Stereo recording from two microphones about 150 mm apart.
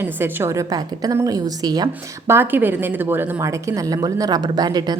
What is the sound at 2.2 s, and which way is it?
A woman's voice, 15° right (ahead or behind).